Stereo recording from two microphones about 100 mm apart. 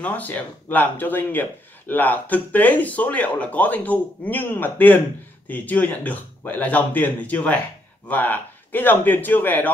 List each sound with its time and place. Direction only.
0.0 s speech: 15° left (ahead or behind)